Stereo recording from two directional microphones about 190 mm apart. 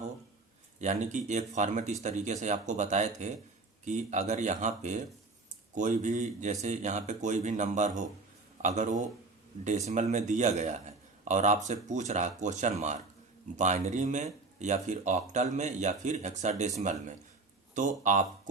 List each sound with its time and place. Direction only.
0.8 s speech: 40° right (ahead or behind)